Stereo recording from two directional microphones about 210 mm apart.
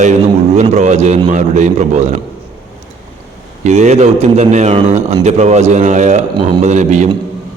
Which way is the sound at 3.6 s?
35° right (ahead or behind).